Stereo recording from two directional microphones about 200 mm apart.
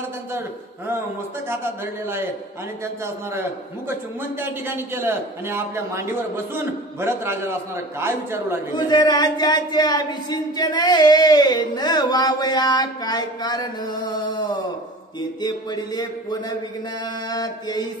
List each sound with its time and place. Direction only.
1.5 s a man's voice: 10° right (ahead or behind)
4.4 s a man's voice: 10° right (ahead or behind)
8.7 s speech: 20° left (ahead or behind)
15.4 s speech: 20° left (ahead or behind)